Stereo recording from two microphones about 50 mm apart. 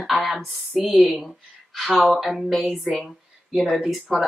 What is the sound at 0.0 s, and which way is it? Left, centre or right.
Speech, centre.